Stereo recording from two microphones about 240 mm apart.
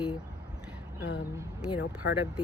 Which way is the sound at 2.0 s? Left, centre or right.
Left.